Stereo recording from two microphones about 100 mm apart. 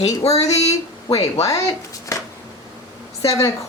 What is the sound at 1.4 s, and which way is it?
Speech, 30° left (ahead or behind).